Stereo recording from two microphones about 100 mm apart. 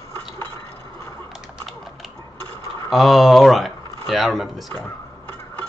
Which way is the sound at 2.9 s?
Centre (ahead or behind).